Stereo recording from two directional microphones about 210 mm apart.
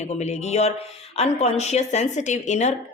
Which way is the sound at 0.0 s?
30° left (ahead or behind).